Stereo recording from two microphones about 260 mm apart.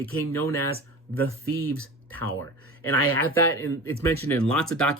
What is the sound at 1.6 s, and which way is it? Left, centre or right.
Speech, right.